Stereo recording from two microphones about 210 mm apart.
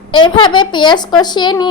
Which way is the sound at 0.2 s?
20° left (ahead or behind).